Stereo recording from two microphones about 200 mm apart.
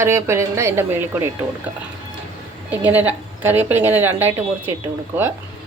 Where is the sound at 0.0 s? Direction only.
15° right (ahead or behind).